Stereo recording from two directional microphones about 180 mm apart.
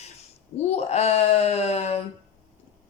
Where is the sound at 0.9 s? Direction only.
35° left (ahead or behind).